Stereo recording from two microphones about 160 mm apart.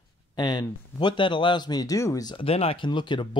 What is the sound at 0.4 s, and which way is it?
Speech, 25° left (ahead or behind).